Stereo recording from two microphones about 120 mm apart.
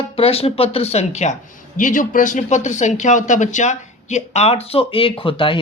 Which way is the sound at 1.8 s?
90° left.